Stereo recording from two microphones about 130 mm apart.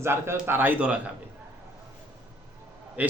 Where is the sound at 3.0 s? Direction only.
15° right (ahead or behind).